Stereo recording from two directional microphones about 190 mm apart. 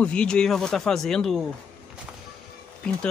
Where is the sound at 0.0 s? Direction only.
5° left (ahead or behind).